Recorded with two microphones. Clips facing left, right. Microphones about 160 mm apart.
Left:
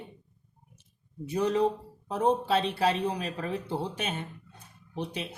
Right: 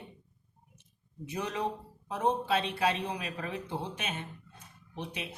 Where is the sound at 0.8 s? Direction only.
35° left (ahead or behind).